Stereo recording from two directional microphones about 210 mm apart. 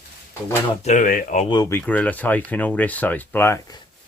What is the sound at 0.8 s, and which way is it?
Speech, 35° left (ahead or behind).